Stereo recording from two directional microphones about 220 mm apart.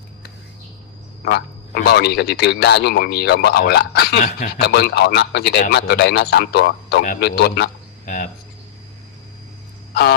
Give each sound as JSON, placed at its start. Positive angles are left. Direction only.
{"t": 1.2, "sound": "speech", "side_deg": 50}
{"t": 4.6, "sound": "a man's voice", "side_deg": 50}
{"t": 9.9, "sound": "a sound", "side_deg": 50}